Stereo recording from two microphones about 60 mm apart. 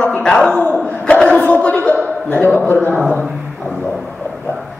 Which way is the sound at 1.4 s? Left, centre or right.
Left.